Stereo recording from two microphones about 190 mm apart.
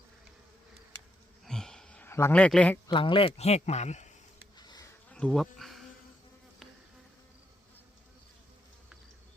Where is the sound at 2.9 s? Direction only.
25° left (ahead or behind).